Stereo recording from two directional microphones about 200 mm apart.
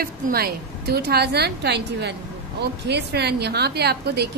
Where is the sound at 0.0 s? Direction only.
50° right (ahead or behind).